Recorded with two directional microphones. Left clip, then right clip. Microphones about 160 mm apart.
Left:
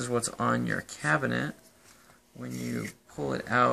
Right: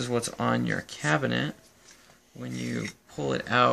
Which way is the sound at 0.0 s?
20° right (ahead or behind).